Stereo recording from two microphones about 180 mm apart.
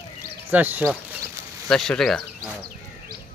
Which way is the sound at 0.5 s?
10° right (ahead or behind).